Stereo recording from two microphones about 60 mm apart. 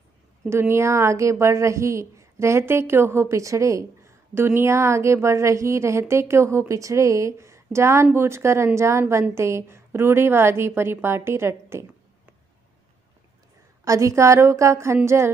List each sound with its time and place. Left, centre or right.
0.5 s a woman's voice: right
13.8 s a woman's voice: right